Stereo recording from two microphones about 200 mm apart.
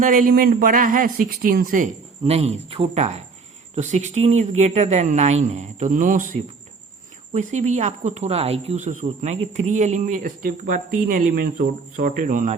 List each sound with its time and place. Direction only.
0.0 s speech: 40° right (ahead or behind)
7.3 s speech: 35° right (ahead or behind)